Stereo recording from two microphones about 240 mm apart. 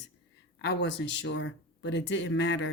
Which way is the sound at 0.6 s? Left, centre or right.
Left.